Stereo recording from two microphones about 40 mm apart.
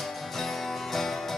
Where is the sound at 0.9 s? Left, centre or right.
Centre.